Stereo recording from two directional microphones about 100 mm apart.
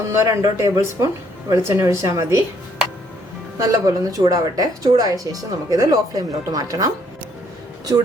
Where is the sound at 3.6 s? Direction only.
35° right (ahead or behind).